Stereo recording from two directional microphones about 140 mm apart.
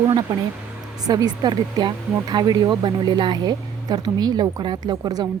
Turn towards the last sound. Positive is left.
turn(degrees=-30)  # may be behind; listen again after turning